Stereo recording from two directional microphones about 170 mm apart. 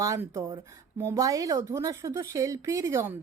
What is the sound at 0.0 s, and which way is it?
Speech, 20° right (ahead or behind).